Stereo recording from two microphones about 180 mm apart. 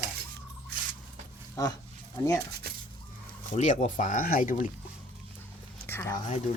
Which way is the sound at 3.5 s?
40° left (ahead or behind).